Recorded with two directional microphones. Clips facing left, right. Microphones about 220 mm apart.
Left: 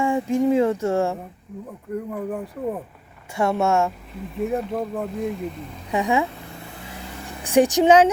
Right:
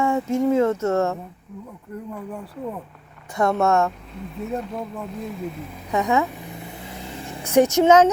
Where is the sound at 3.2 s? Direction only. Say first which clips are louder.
Right 1 dB; 10° left (ahead or behind).